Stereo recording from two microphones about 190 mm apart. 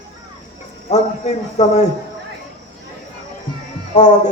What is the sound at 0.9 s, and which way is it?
Speech, 35° left (ahead or behind).